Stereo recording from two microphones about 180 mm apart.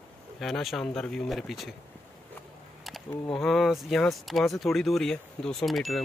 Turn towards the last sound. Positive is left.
turn(degrees=0)  # may be behind; listen again after turning